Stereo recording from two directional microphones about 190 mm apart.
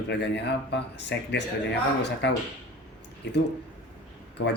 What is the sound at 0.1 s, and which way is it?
Speech, 65° left (ahead or behind).